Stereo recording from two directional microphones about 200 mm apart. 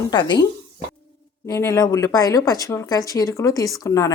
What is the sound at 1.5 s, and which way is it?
Speech, 15° left (ahead or behind).